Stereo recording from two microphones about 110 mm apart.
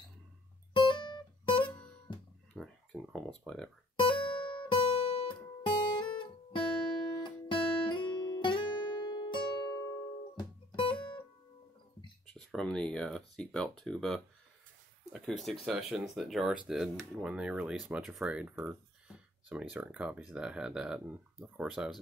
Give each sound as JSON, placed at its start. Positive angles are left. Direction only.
{"t": 0.7, "sound": "guitar", "side_deg": 50}
{"t": 2.5, "sound": "a sound", "side_deg": 5}
{"t": 4.0, "sound": "guitar", "side_deg": 50}
{"t": 10.3, "sound": "music", "side_deg": 50}
{"t": 12.4, "sound": "speech", "side_deg": 5}